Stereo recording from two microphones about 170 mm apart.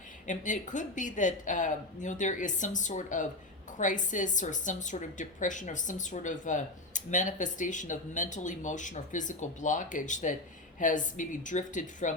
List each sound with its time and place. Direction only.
0.3 s a woman's voice: 45° left (ahead or behind)